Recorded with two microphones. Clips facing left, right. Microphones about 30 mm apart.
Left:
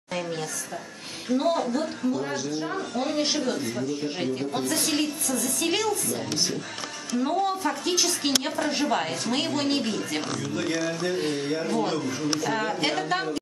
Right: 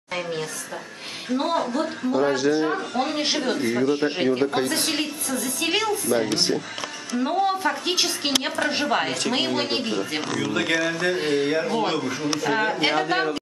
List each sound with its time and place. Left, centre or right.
0.1 s a sound: right
1.3 s speech: right
2.1 s speech: right
2.7 s speech: right
4.9 s speech: right
7.1 s speech: right
10.6 s speech: right
11.1 s speech: right